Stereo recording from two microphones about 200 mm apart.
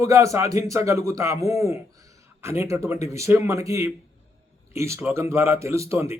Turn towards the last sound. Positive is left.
turn(degrees=-15)  # may be behind; listen again after turning